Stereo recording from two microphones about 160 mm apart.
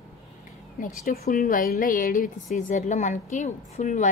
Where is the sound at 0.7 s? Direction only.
55° left (ahead or behind).